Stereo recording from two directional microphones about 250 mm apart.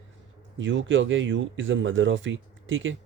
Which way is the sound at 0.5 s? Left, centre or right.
Right.